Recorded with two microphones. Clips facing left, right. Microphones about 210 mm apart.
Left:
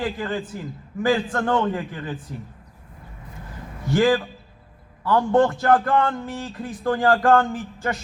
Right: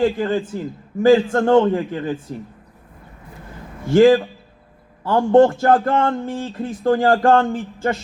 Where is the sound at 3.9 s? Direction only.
25° right (ahead or behind).